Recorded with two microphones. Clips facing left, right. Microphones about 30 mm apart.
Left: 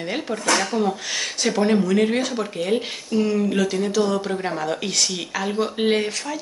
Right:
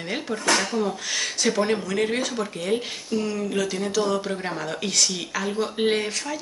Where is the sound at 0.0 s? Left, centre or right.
Centre.